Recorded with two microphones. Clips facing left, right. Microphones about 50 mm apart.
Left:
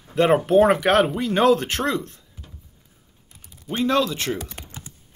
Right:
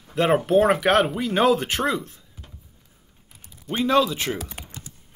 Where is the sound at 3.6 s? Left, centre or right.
Centre.